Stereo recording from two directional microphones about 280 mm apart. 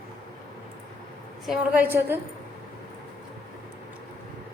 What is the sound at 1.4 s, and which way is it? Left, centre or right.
Speech, centre.